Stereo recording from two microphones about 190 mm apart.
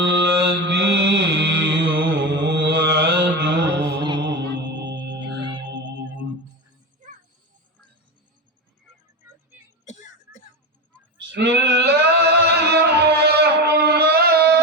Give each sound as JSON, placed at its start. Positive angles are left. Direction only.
{"t": 0.0, "sound": "mantra", "side_deg": -65}
{"t": 4.2, "sound": "music", "side_deg": -65}
{"t": 9.8, "sound": "a sound", "side_deg": 40}
{"t": 11.2, "sound": "male singing", "side_deg": -70}